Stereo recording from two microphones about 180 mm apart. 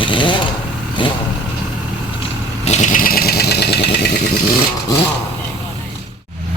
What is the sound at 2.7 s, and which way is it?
Vehicle, 40° left (ahead or behind).